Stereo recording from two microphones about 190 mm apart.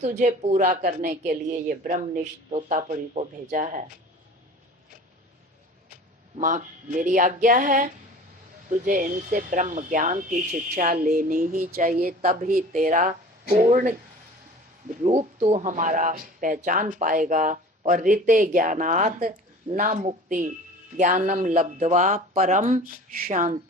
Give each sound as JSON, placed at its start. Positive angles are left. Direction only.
{"t": 0.0, "sound": "a woman's voice", "side_deg": -40}
{"t": 5.9, "sound": "speech", "side_deg": -40}
{"t": 14.8, "sound": "a woman's voice", "side_deg": -40}